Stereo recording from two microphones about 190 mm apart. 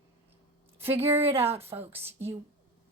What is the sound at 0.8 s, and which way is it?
Speech, 30° right (ahead or behind).